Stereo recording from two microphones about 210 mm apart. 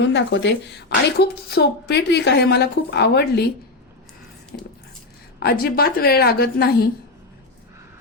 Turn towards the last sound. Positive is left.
turn(degrees=45)  # may be behind; listen again after turning